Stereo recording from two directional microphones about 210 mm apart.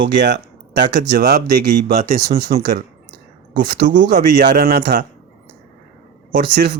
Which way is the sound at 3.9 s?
55° right (ahead or behind).